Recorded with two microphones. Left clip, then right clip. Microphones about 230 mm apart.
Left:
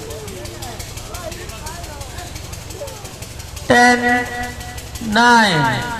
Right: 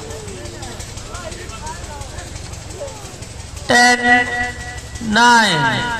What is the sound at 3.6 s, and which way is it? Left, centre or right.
Music, right.